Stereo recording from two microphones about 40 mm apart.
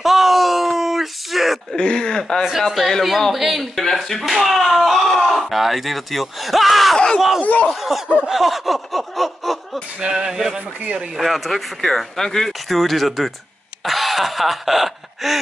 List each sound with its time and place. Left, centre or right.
0.0 s a sound: centre
1.8 s speech: left
2.6 s speech: centre
3.8 s speech: centre
7.4 s speech: left
8.3 s speech: centre
10.0 s speech: centre
11.1 s speech: centre
13.8 s a sound: centre